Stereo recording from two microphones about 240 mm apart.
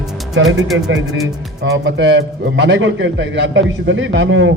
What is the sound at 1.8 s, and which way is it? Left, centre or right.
Speech, right.